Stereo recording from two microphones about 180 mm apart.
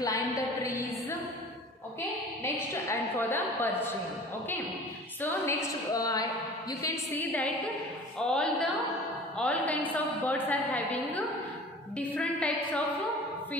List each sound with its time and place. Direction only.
0.0 s a sound: 20° left (ahead or behind)
0.7 s music: 15° left (ahead or behind)
2.0 s a woman's voice: 10° left (ahead or behind)
5.2 s a woman's voice: 15° left (ahead or behind)